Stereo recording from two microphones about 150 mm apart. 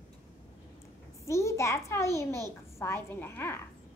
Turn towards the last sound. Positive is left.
turn(degrees=15)  # may be behind; listen again after turning